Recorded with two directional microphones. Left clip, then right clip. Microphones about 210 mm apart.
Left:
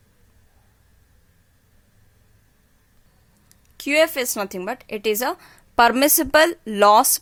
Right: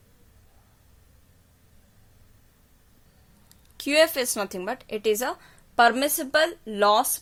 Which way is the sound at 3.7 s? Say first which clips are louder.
Left 2 dB; 15° left (ahead or behind).